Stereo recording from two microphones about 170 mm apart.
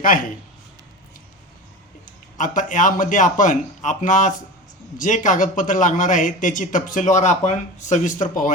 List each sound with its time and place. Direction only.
2.0 s a man's voice: 50° left (ahead or behind)